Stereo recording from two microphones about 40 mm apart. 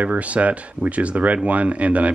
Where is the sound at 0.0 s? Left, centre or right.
Right.